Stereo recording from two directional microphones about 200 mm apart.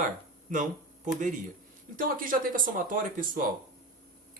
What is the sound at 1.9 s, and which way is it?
Speech, 45° right (ahead or behind).